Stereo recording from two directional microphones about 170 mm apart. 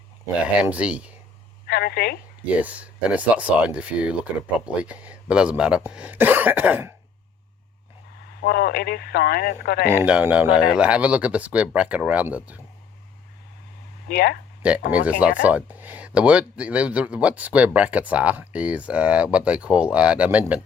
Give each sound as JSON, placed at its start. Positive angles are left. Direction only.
{"t": 0.4, "sound": "speech", "side_deg": -10}
{"t": 1.6, "sound": "a woman's voice", "side_deg": 70}
{"t": 2.6, "sound": "speech", "side_deg": -10}
{"t": 8.4, "sound": "speech", "side_deg": 65}
{"t": 9.9, "sound": "speech", "side_deg": -10}
{"t": 14.1, "sound": "speech", "side_deg": 70}
{"t": 14.6, "sound": "speech", "side_deg": -10}